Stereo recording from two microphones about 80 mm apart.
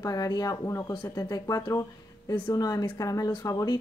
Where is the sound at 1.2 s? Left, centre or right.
Left.